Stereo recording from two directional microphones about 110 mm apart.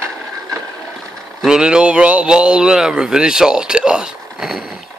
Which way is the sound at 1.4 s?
5° right (ahead or behind).